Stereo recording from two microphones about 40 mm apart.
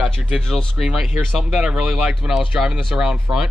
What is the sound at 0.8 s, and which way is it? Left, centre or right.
Speech, centre.